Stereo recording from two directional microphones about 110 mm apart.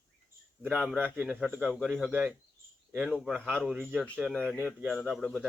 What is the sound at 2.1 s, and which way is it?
Speech, 15° right (ahead or behind).